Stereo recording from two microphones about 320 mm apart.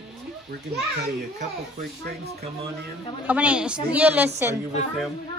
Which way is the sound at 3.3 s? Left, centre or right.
Centre.